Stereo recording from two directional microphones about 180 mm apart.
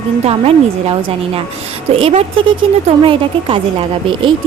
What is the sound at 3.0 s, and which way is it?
Speech, 30° right (ahead or behind).